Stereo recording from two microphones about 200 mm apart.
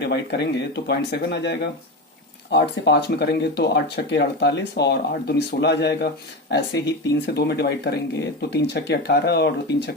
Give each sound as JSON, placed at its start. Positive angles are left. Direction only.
{"t": 0.0, "sound": "speech", "side_deg": 60}